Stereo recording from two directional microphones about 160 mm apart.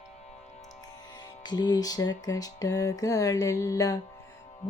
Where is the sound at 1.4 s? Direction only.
25° left (ahead or behind).